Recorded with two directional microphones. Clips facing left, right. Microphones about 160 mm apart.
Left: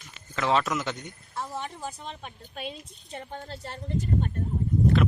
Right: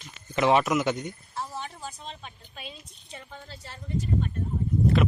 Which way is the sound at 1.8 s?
55° left (ahead or behind).